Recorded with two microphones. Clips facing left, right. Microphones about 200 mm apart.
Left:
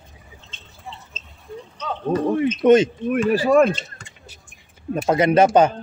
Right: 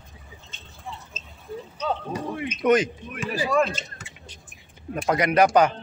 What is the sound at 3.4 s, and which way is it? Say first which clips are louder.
Speech: left 6 dB; 50° left (ahead or behind).